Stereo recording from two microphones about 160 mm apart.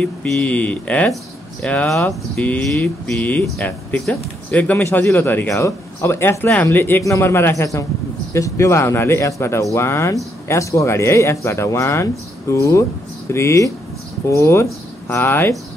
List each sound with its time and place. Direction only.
0.0 s speech: 10° left (ahead or behind)